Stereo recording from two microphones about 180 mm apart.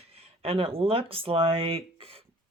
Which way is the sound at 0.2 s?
30° right (ahead or behind).